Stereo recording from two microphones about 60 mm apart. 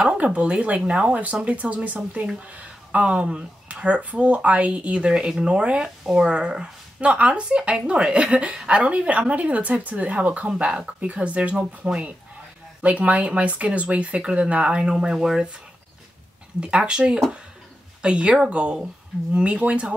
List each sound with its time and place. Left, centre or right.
0.2 s speech: right
16.5 s speech: centre